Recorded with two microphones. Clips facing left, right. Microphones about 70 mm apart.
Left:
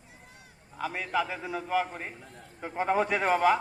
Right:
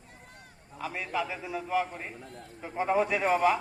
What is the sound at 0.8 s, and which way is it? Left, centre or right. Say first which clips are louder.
A man's voice: left 3 dB; left.